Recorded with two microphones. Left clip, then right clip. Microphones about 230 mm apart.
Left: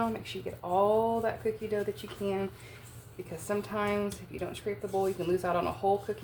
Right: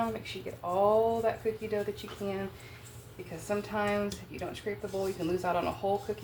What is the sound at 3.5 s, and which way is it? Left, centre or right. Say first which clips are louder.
Speech: even; left.